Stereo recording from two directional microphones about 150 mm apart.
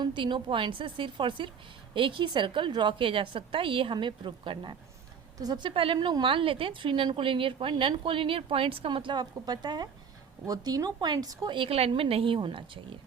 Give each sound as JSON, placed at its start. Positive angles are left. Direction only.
{"t": 0.0, "sound": "a woman's voice", "side_deg": -30}